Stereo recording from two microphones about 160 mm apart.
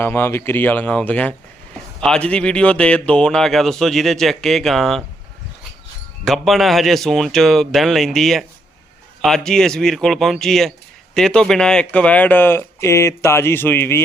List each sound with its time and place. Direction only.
0.0 s speech: 15° left (ahead or behind)
6.2 s speech: centre (ahead or behind)